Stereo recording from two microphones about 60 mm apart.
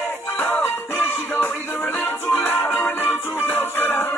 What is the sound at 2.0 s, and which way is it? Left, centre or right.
Music, left.